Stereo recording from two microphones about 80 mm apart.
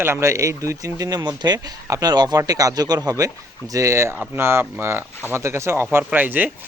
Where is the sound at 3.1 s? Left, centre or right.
Right.